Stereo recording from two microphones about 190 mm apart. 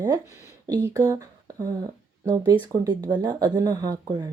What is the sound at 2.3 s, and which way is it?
Speech, 20° right (ahead or behind).